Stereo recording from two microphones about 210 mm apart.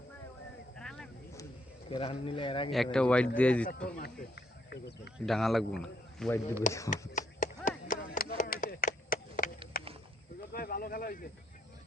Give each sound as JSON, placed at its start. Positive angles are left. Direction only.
{"t": 0.8, "sound": "vehicle", "side_deg": 5}
{"t": 1.9, "sound": "speech", "side_deg": 25}
{"t": 2.7, "sound": "a man's voice", "side_deg": 0}
{"t": 3.8, "sound": "speech", "side_deg": 50}
{"t": 5.2, "sound": "a man's voice", "side_deg": 0}
{"t": 6.7, "sound": "speech", "side_deg": 35}
{"t": 7.2, "sound": "a sound", "side_deg": 40}
{"t": 7.9, "sound": "chop", "side_deg": 40}
{"t": 9.7, "sound": "a sound", "side_deg": 45}
{"t": 10.5, "sound": "speech", "side_deg": 45}